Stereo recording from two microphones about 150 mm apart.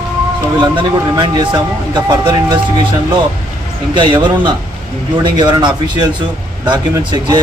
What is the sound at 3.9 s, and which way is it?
Speech, 30° right (ahead or behind).